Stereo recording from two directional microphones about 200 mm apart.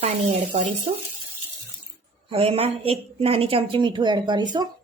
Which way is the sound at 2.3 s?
30° right (ahead or behind).